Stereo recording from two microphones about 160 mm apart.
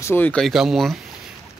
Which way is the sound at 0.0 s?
10° left (ahead or behind).